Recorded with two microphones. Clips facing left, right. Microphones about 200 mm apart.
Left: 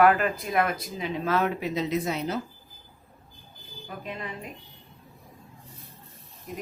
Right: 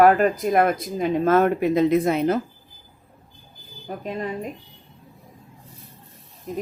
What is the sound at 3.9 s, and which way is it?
Speech, 40° right (ahead or behind).